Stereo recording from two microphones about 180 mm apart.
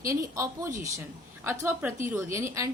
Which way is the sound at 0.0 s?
15° right (ahead or behind).